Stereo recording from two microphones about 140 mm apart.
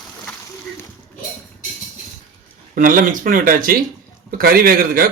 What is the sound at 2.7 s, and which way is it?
A man's voice, 75° right (ahead or behind).